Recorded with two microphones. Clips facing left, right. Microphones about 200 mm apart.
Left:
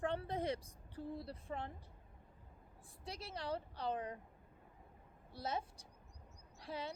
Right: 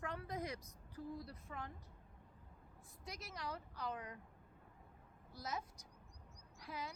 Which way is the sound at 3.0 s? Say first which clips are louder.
Left 4 dB; 30° left (ahead or behind).